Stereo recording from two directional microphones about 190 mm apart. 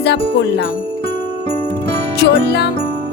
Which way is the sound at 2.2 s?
60° left (ahead or behind).